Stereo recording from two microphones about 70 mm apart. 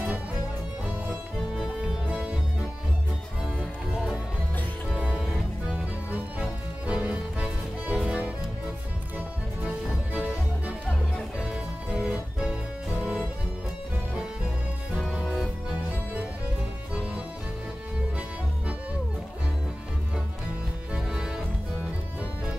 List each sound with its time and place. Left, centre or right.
1.5 s music: centre
4.9 s music: centre
5.2 s music: centre
6.4 s music: centre
11.3 s music: centre
16.9 s music: centre
20.9 s music: centre